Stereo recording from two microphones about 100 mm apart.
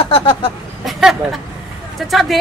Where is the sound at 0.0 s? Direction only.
70° left (ahead or behind).